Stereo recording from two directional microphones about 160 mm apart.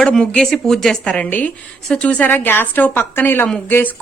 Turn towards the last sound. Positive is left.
turn(degrees=10)  # may be behind; listen again after turning